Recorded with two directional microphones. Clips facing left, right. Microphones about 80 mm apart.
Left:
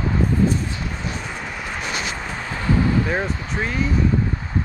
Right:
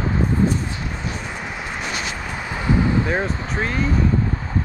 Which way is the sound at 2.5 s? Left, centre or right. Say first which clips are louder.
Even; centre.